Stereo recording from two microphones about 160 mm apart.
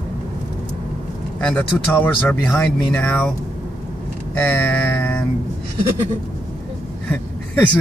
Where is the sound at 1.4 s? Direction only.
5° left (ahead or behind).